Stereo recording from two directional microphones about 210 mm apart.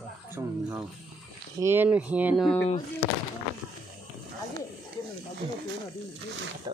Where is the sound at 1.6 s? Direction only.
10° right (ahead or behind).